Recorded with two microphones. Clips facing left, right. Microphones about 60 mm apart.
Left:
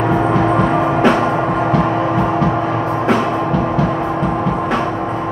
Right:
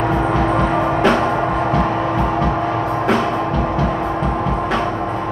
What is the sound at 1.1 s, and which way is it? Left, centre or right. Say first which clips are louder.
Gong: left 1 dB; centre.